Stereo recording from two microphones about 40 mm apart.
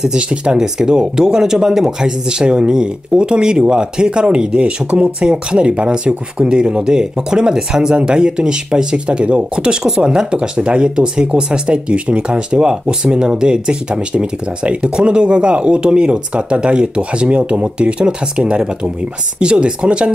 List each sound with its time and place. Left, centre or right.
0.0 s speech: centre
9.8 s speech: centre